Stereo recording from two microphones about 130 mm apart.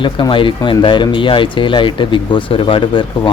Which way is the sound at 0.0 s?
40° left (ahead or behind).